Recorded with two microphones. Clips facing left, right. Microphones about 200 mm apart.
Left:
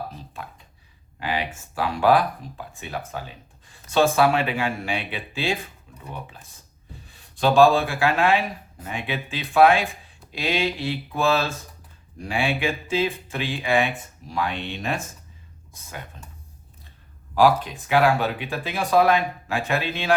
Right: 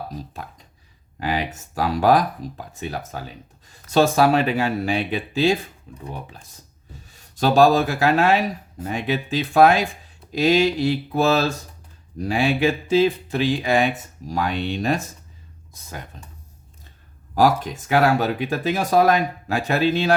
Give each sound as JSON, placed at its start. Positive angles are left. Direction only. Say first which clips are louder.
{"t": 0.1, "sound": "speech", "louder": "right 4 dB", "side_deg": -40}
{"t": 17.3, "sound": "speech", "louder": "even", "side_deg": -45}